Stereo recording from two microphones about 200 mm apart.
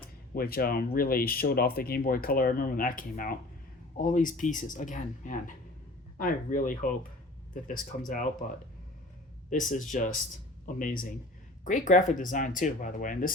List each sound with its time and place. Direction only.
0.3 s speech: 50° left (ahead or behind)
8.0 s speech: 40° left (ahead or behind)
9.5 s speech: 40° left (ahead or behind)